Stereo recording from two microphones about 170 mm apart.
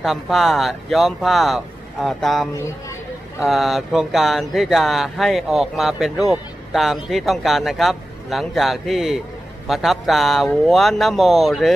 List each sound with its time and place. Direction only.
0.0 s speech: centre (ahead or behind)
2.5 s a sound: 15° left (ahead or behind)
3.4 s speech: centre (ahead or behind)